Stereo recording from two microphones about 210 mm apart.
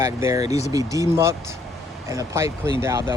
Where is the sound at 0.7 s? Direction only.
15° right (ahead or behind).